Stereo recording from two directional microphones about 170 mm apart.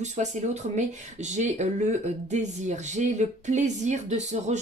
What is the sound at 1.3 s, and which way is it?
Speech, 45° right (ahead or behind).